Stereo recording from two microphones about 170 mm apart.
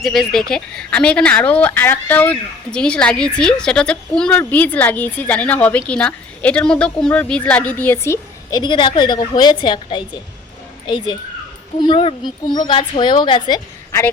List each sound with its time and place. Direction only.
0.0 s a woman's voice: centre (ahead or behind); by 13.6 s 25° left (ahead or behind)